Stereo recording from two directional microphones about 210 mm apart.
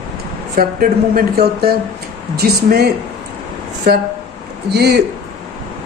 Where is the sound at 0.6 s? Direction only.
45° right (ahead or behind).